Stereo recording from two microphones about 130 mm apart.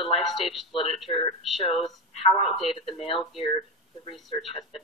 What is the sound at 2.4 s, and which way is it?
Speech, 50° left (ahead or behind).